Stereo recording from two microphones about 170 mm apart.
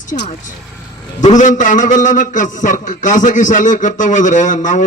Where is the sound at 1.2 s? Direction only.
45° left (ahead or behind).